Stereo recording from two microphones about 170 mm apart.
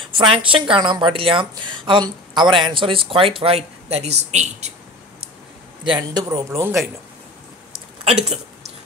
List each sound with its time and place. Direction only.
0.1 s a woman's voice: 30° right (ahead or behind)
5.9 s speech: 25° right (ahead or behind)